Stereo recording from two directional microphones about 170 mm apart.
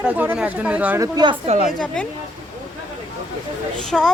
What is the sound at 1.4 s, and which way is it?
Speech, 45° right (ahead or behind).